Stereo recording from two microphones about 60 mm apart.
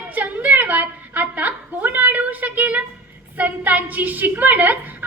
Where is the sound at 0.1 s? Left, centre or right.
Right.